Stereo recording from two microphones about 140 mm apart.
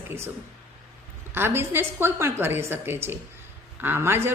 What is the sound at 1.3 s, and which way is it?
Speech, 15° right (ahead or behind).